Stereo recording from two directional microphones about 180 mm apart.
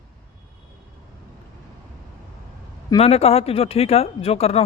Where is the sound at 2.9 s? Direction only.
35° left (ahead or behind).